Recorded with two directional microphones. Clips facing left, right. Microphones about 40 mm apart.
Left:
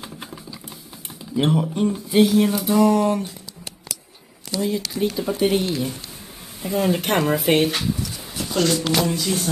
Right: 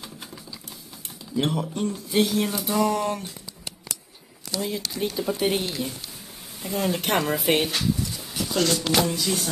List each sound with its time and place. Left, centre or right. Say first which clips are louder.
0.0 s a sound: left 4 dB; left
1.3 s speech: left 5 dB; centre
2.1 s speech: left 6 dB; centre
4.6 s speech: left 5 dB; centre
7.7 s a sound: left 1 dB; centre
9.1 s speech: left 3 dB; centre